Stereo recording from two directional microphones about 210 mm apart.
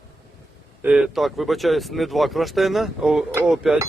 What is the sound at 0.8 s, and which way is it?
Speech, 5° right (ahead or behind).